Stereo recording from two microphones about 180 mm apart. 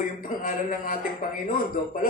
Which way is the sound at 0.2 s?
50° left (ahead or behind).